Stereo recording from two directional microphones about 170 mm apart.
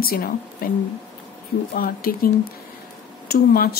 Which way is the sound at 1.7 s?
60° left (ahead or behind).